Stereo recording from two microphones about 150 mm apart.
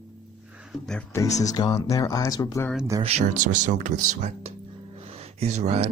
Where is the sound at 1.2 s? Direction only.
50° left (ahead or behind).